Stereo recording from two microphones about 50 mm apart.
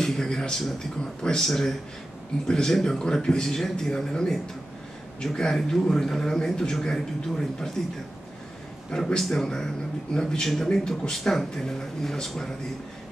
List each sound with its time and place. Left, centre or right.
0.0 s a man's voice: centre
8.9 s a man's voice: centre